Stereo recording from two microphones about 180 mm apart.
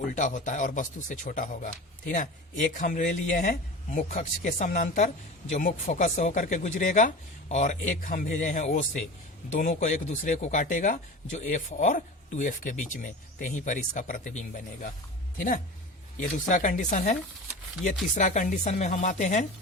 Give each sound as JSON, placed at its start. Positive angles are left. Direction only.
{"t": 0.1, "sound": "speech", "side_deg": 45}